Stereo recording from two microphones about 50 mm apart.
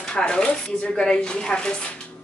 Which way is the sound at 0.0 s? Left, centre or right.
Centre.